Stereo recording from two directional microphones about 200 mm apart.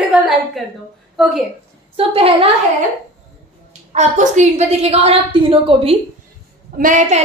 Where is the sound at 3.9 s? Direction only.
35° right (ahead or behind).